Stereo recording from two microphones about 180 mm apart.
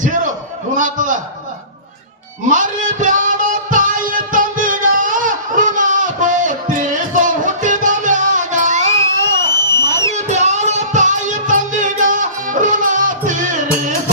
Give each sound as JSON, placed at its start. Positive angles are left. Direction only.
{"t": 0.8, "sound": "a man's voice", "side_deg": -45}
{"t": 2.5, "sound": "music", "side_deg": -45}
{"t": 9.5, "sound": "a sound", "side_deg": 15}
{"t": 10.2, "sound": "music", "side_deg": -40}